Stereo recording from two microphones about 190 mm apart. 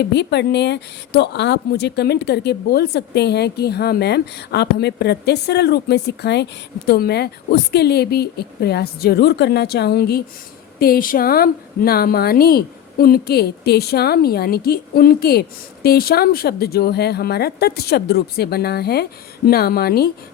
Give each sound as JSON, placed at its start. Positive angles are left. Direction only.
{"t": 0.0, "sound": "speech", "side_deg": 65}